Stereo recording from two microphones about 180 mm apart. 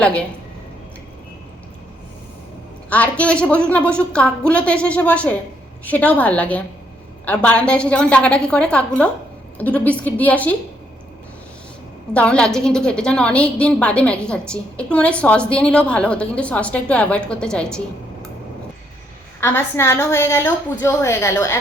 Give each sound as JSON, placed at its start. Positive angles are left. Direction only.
{"t": 0.0, "sound": "a woman's voice", "side_deg": 5}
{"t": 2.9, "sound": "a woman's voice", "side_deg": 5}
{"t": 12.1, "sound": "a woman's voice", "side_deg": 5}
{"t": 19.4, "sound": "a woman's voice", "side_deg": 15}